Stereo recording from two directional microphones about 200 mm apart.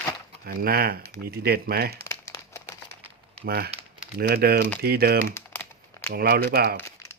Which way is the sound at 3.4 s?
50° right (ahead or behind).